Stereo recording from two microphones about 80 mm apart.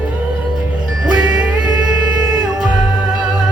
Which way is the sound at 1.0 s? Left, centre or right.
Centre.